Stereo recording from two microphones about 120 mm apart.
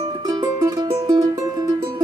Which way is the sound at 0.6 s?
30° right (ahead or behind).